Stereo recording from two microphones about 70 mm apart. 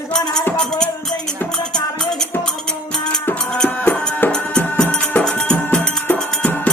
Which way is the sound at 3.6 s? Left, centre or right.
Left.